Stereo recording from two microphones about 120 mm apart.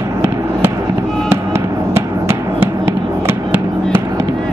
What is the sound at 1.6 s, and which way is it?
Music, 25° right (ahead or behind).